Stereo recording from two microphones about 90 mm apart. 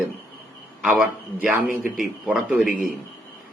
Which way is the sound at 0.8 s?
10° right (ahead or behind).